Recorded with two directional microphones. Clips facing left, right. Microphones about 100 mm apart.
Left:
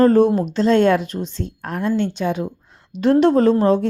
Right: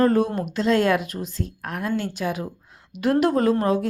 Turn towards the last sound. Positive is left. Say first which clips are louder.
# left 5 dB
turn(degrees=30)  # may be behind; listen again after turning